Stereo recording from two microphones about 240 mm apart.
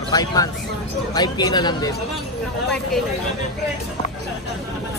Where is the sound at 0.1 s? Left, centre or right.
Centre.